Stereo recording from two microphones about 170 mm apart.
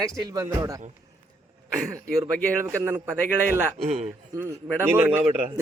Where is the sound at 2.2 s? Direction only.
15° right (ahead or behind).